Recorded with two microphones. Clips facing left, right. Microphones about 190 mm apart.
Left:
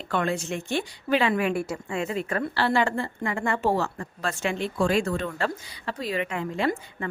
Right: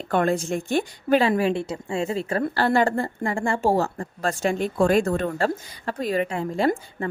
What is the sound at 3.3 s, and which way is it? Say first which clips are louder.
Speech: right 3 dB; 30° right (ahead or behind).